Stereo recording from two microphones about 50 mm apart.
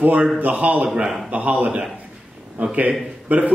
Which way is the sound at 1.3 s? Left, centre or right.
Right.